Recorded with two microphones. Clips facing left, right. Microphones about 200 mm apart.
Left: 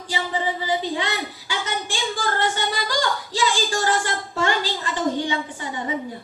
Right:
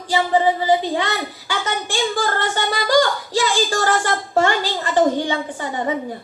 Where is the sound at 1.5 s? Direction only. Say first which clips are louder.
Right 4 dB; 60° right (ahead or behind).